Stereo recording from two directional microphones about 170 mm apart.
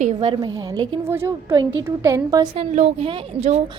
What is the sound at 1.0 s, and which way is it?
A woman's voice, 15° right (ahead or behind).